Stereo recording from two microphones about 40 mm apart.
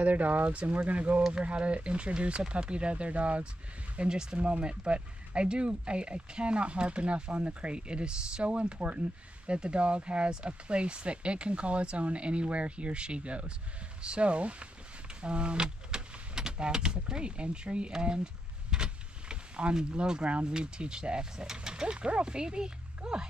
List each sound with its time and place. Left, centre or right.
0.0 s speech: right; by 23.2 s centre